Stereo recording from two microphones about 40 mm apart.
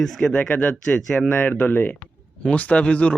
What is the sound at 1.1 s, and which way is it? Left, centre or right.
Speech, left.